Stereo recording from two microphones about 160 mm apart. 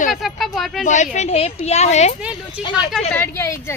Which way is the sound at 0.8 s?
50° left (ahead or behind).